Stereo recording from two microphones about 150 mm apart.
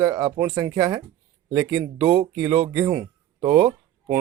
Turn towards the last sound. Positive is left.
turn(degrees=-30)  # may be behind; listen again after turning